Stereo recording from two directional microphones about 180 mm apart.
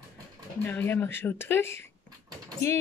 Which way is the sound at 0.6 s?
10° left (ahead or behind).